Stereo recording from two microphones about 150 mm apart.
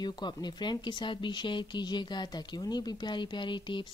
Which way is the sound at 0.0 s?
30° left (ahead or behind).